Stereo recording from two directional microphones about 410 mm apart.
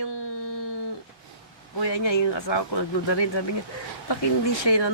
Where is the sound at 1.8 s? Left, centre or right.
Left.